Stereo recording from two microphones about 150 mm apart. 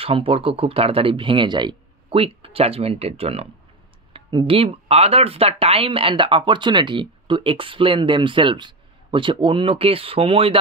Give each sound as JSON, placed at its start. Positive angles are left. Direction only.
{"t": 0.0, "sound": "speech", "side_deg": -40}